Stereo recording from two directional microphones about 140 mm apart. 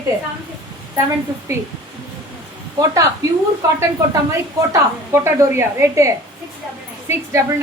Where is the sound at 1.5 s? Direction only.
20° right (ahead or behind).